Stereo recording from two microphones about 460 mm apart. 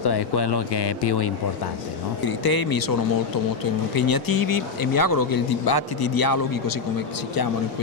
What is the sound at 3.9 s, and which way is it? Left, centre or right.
Speech, left.